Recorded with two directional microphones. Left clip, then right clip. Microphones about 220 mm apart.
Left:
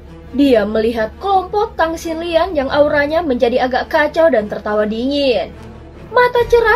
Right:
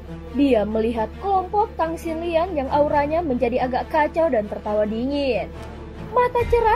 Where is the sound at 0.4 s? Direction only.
30° right (ahead or behind).